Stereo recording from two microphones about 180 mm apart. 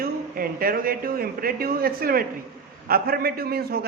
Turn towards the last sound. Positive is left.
turn(degrees=-60)  # may be behind; listen again after turning